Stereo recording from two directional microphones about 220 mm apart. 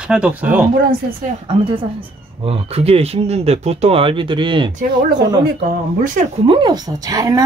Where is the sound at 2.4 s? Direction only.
25° right (ahead or behind).